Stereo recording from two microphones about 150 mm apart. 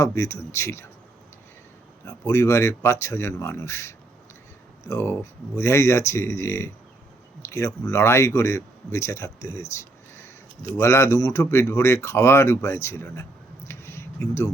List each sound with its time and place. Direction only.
0.0 s speech: 20° left (ahead or behind)
2.0 s a man's voice: 20° left (ahead or behind)
13.7 s a sound: 15° left (ahead or behind)